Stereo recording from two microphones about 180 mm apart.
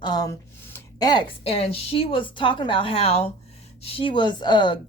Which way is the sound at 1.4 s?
35° left (ahead or behind).